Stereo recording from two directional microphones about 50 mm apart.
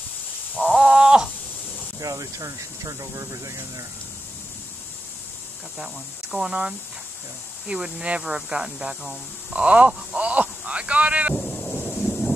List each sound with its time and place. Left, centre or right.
0.6 s crow: centre
3.0 s speech: right
5.8 s speech: centre
7.6 s speech: centre
9.5 s speech: right
11.3 s a sound: centre
11.6 s thunder: left
12.0 s thunder: centre